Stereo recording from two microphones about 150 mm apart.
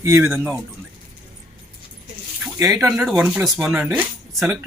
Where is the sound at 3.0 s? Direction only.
5° right (ahead or behind).